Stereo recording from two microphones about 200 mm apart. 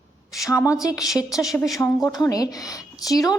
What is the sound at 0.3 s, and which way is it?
A woman's voice, 15° left (ahead or behind).